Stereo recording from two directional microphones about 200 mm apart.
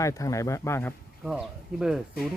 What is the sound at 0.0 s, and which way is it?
Speech, 15° left (ahead or behind).